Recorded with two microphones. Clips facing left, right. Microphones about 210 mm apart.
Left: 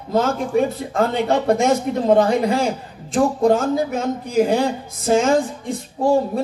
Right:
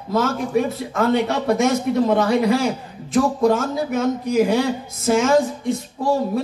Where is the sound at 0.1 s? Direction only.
30° left (ahead or behind).